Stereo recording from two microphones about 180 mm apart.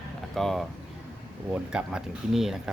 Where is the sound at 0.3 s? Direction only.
Centre (ahead or behind).